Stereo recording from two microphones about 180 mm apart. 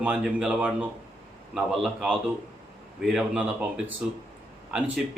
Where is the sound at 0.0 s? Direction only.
5° right (ahead or behind).